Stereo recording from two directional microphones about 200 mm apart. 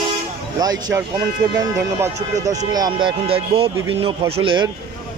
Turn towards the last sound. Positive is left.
turn(degrees=-25)  # may be behind; listen again after turning